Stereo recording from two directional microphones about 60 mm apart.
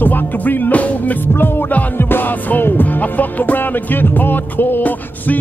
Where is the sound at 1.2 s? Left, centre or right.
Left.